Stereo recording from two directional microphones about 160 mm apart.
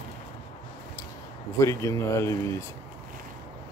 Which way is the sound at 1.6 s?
20° left (ahead or behind).